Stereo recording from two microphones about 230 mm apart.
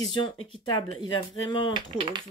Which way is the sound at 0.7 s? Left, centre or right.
Left.